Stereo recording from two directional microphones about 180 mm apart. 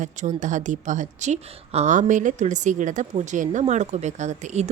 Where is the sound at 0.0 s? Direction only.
40° right (ahead or behind).